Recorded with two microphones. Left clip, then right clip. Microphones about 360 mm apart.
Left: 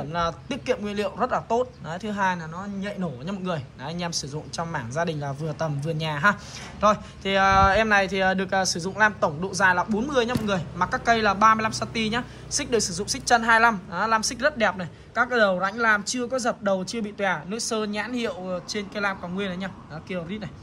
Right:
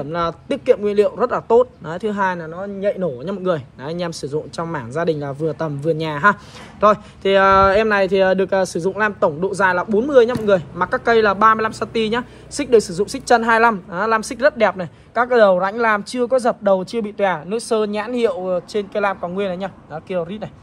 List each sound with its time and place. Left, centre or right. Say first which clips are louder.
0.1 s speech: right 5 dB; centre